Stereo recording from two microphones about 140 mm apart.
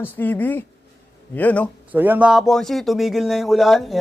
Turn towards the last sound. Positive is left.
turn(degrees=0)  # may be behind; listen again after turning